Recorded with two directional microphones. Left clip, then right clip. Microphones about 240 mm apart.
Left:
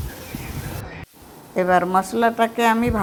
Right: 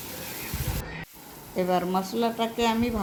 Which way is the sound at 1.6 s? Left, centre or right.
Left.